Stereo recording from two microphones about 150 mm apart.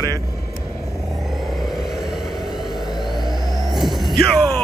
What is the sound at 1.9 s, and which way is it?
Vehicle, centre (ahead or behind).